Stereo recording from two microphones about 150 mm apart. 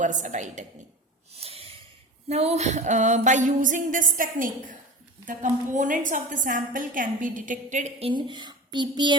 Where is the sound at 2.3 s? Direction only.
45° right (ahead or behind).